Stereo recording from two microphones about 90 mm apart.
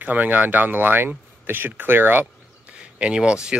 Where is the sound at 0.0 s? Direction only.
20° right (ahead or behind).